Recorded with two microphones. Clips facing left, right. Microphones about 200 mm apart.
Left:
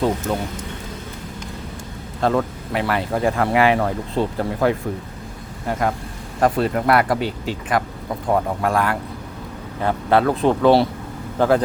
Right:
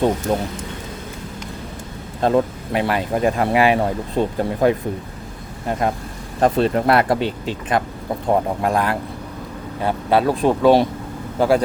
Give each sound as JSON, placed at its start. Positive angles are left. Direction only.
{"t": 0.3, "sound": "speech", "side_deg": -35}
{"t": 2.2, "sound": "speech", "side_deg": -20}
{"t": 6.4, "sound": "speech", "side_deg": -25}